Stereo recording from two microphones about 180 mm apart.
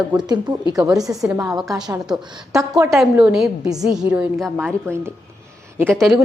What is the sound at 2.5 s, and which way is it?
Speech, 15° right (ahead or behind).